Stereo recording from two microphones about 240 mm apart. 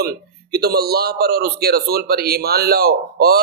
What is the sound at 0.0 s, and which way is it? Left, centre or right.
A man's voice, right.